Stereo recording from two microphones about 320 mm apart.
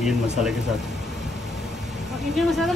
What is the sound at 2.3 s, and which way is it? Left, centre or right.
Speech, centre.